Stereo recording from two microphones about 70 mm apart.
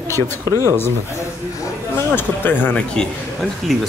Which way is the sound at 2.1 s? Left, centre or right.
Left.